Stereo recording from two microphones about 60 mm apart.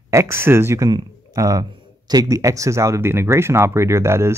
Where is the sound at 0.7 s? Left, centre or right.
Right.